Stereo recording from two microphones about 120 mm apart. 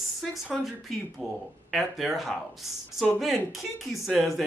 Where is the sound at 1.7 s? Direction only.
Centre (ahead or behind).